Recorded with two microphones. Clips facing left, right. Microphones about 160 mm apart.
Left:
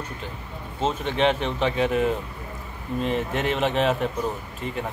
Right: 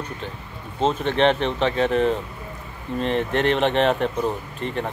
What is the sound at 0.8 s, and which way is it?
Speech, 10° left (ahead or behind).